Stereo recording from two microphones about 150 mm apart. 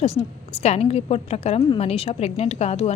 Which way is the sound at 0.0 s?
45° left (ahead or behind).